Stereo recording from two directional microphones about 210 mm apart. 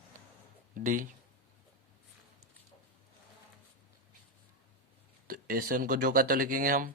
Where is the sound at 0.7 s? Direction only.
40° right (ahead or behind).